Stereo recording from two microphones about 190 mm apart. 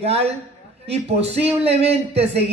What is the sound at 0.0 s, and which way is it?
Speech, 30° right (ahead or behind).